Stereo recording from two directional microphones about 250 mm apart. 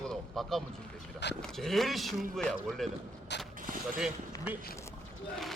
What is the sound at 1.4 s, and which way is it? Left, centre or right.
Speech, centre.